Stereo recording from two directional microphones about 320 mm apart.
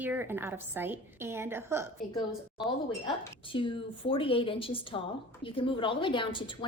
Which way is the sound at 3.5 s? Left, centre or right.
Centre.